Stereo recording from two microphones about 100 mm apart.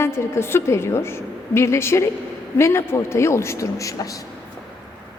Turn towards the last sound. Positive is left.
turn(degrees=35)  # may be behind; listen again after turning